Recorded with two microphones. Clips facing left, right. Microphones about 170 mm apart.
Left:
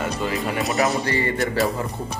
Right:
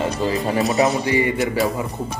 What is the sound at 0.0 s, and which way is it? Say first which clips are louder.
Music: right 4 dB; 30° right (ahead or behind).